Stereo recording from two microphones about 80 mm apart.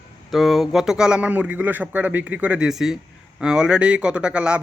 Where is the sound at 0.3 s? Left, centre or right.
Centre.